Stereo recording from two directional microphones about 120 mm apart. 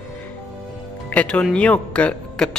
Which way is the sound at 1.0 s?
10° left (ahead or behind).